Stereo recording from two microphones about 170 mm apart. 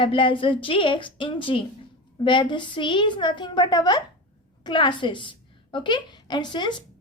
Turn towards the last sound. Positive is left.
turn(degrees=25)  # may be behind; listen again after turning